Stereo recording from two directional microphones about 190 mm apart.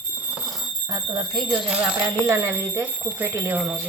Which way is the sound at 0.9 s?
25° right (ahead or behind).